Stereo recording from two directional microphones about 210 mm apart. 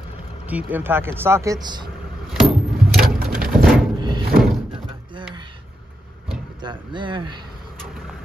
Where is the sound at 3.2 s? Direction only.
45° right (ahead or behind).